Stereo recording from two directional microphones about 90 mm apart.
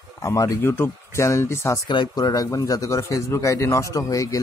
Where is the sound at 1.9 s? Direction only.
55° left (ahead or behind); by 4.4 s 40° left (ahead or behind).